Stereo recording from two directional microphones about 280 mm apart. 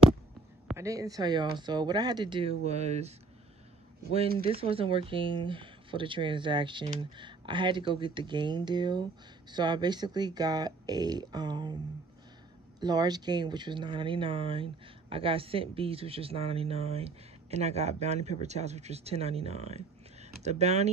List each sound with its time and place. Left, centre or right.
0.7 s speech: centre
4.4 s speech: centre
12.8 s speech: centre